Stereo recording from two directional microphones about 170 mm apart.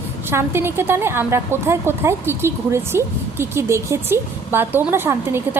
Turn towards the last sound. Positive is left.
turn(degrees=-15)  # may be behind; listen again after turning